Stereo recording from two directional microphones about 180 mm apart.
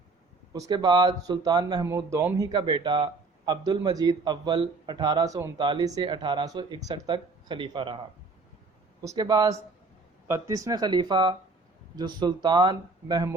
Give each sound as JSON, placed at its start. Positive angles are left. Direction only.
{"t": 0.5, "sound": "a man's voice", "side_deg": -20}
{"t": 2.5, "sound": "a man's voice", "side_deg": -25}